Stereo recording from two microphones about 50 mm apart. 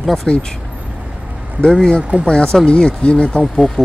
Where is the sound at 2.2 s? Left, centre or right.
Centre.